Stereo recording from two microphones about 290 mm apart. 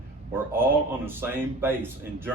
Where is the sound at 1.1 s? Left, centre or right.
Centre.